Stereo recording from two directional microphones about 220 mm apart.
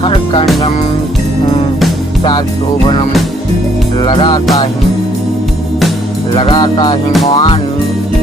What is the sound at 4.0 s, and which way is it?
Music, 25° left (ahead or behind).